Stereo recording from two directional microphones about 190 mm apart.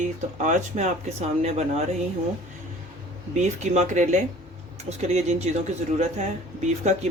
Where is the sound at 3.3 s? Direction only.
35° right (ahead or behind).